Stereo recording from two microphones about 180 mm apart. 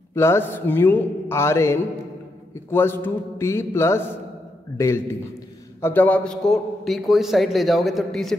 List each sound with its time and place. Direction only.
0.1 s a man's voice: 15° left (ahead or behind)